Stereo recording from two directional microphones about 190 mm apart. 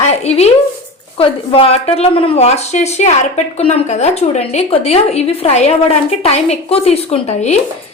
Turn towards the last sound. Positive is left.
turn(degrees=35)  # may be behind; listen again after turning